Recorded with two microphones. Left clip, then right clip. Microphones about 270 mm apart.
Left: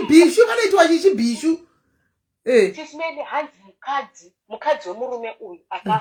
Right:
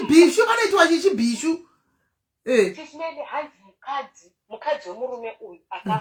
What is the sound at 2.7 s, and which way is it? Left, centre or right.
A woman's voice, left.